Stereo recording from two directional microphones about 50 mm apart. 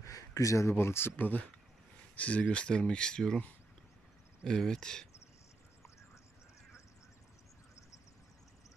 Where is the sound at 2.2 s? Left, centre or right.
Left.